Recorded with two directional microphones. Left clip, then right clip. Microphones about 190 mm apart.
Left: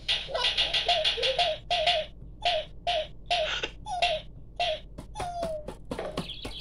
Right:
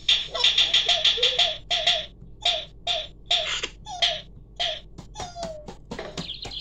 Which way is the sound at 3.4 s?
5° left (ahead or behind).